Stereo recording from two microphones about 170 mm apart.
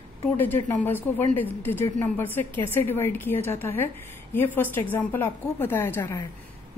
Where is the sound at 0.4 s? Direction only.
10° left (ahead or behind).